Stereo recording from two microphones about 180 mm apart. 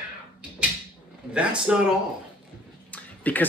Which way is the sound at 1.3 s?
5° right (ahead or behind).